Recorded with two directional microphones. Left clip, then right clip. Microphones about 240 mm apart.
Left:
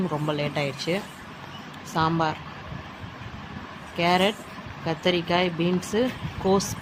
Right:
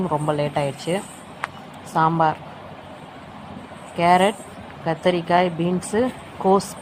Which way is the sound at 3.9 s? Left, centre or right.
Centre.